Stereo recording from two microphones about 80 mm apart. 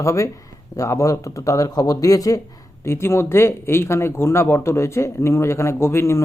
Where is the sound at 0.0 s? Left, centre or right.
Left.